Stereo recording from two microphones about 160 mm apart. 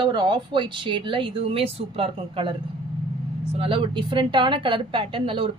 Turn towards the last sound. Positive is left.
turn(degrees=-35)  # may be behind; listen again after turning